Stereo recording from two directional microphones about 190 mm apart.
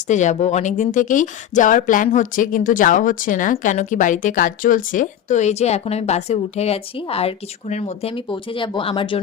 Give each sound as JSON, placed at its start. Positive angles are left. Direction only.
{"t": 0.1, "sound": "speech", "side_deg": 40}